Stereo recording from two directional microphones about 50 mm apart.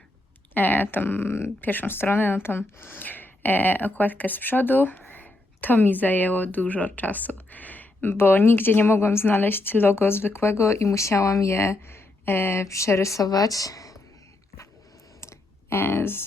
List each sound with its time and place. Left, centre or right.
0.5 s a woman's voice: left
8.0 s a woman's voice: left
12.6 s speech: left
15.2 s a sound: left
15.8 s a woman's voice: left